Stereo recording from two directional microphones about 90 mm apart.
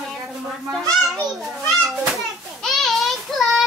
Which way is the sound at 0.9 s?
Centre (ahead or behind).